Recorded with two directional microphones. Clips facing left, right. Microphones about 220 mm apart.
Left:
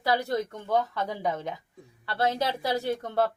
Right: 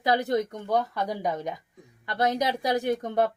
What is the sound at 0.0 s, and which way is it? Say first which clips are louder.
Speech: right 2 dB; 20° right (ahead or behind).